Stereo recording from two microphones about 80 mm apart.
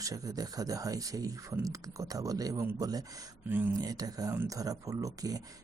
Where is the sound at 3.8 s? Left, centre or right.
Right.